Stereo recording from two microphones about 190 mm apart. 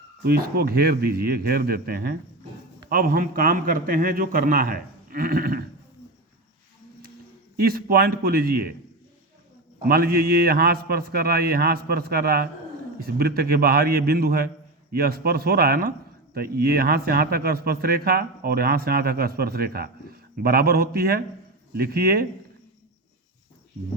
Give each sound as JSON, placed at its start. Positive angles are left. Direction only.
{"t": 0.3, "sound": "speech", "side_deg": -55}
{"t": 7.6, "sound": "speech", "side_deg": -50}
{"t": 9.8, "sound": "speech", "side_deg": -50}